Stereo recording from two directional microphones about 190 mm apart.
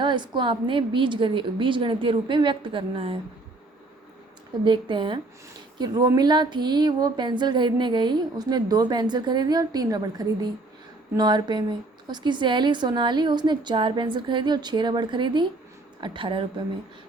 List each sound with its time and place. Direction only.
0.0 s speech: 25° right (ahead or behind)
4.6 s speech: 25° right (ahead or behind)